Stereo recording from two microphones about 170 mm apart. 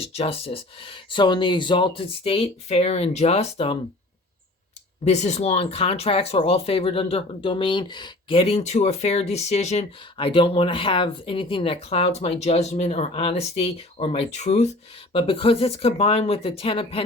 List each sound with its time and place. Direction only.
0.0 s speech: 35° left (ahead or behind)
5.0 s speech: 40° left (ahead or behind)